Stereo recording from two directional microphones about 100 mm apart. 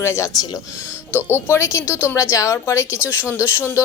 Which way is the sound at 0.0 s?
25° left (ahead or behind).